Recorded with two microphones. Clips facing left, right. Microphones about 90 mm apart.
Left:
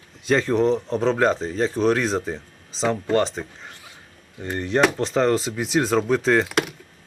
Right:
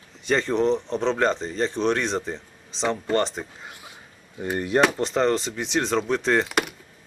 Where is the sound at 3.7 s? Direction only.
20° right (ahead or behind).